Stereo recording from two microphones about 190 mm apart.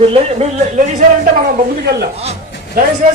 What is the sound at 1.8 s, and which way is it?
Speech, 60° right (ahead or behind).